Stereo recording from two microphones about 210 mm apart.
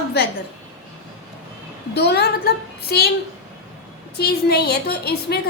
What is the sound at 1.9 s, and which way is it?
A woman's voice, 50° left (ahead or behind).